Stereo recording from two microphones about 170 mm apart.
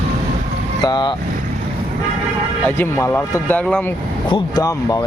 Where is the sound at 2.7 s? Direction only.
15° left (ahead or behind).